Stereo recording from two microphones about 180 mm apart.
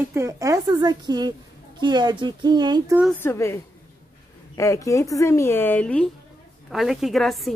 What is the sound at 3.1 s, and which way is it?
Speech, 15° left (ahead or behind).